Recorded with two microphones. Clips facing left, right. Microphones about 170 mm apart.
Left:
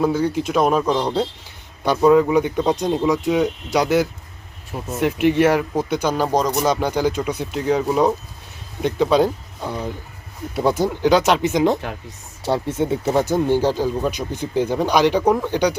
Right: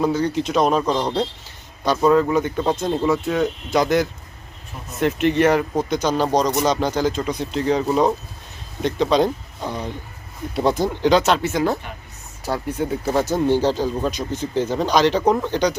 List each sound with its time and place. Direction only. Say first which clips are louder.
0.0 s speech: left 1 dB; 10° left (ahead or behind)
4.7 s speech: left 8 dB; 90° left
5.2 s speech: left 1 dB; 10° left (ahead or behind)